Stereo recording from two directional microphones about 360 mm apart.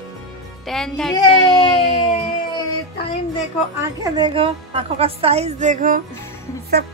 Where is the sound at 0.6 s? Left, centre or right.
Centre.